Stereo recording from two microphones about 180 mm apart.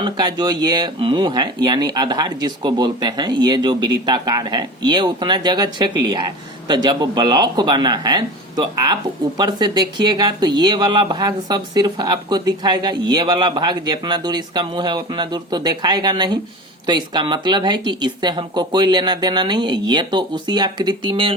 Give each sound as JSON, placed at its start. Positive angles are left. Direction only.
{"t": 0.0, "sound": "speech", "side_deg": -25}